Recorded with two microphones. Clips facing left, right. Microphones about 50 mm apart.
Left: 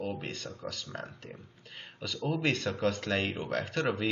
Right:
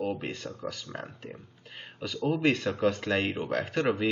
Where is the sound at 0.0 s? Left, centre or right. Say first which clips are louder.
Right 4 dB; centre.